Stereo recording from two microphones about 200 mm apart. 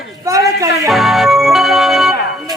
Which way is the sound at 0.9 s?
Centre (ahead or behind).